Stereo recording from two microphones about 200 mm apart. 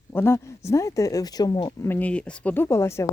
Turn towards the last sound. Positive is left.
turn(degrees=15)  # may be behind; listen again after turning